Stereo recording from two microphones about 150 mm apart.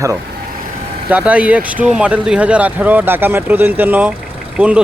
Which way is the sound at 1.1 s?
10° right (ahead or behind).